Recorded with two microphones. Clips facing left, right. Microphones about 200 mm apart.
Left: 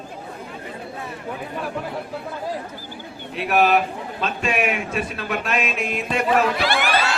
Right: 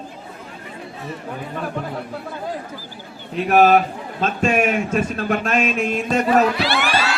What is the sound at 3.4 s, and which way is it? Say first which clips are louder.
Speech: right 4 dB; 45° right (ahead or behind).